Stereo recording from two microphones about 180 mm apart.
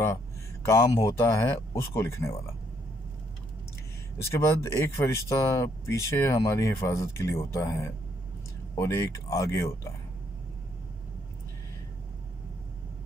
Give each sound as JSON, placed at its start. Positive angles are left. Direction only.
{"t": 0.7, "sound": "speech", "side_deg": 15}
{"t": 4.2, "sound": "speech", "side_deg": 15}